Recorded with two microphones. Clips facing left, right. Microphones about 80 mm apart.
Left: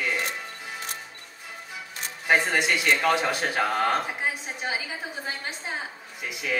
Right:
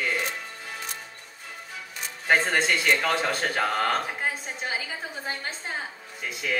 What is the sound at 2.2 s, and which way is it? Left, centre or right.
Speech, centre.